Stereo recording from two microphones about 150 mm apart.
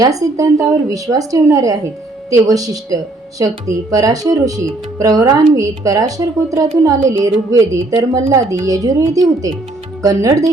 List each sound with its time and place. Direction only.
0.0 s speech: 25° right (ahead or behind)